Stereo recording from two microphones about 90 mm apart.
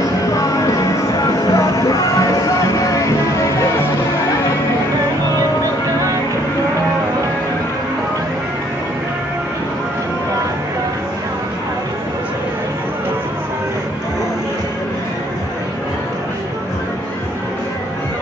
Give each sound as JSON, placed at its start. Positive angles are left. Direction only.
{"t": 0.3, "sound": "music", "side_deg": 35}